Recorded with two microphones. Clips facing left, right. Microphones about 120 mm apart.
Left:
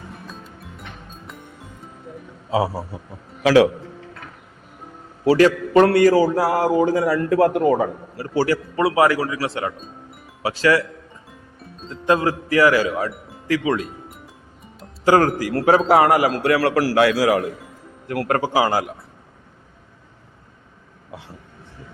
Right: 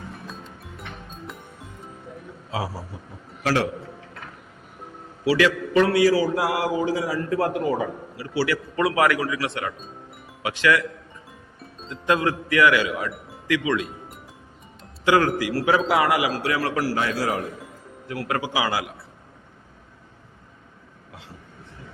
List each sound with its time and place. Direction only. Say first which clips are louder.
5.2 s a man's voice: left 5 dB; 40° left (ahead or behind)
8.7 s a man's voice: left 3 dB; 30° left (ahead or behind)
11.3 s music: left 2 dB; centre (ahead or behind)
11.9 s speech: left 3 dB; 30° left (ahead or behind)
15.0 s a man's voice: left 4 dB; 40° left (ahead or behind); by 17.4 s 85° left
18.1 s a man's voice: left 6 dB; 60° left (ahead or behind)
18.3 s a man's voice: left 6 dB; 45° left (ahead or behind)